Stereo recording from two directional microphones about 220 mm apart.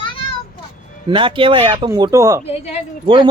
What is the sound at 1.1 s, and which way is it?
Speech, 25° right (ahead or behind).